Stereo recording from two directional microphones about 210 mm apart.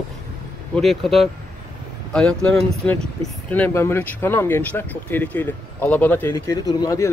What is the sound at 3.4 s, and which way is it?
Speech, 10° left (ahead or behind).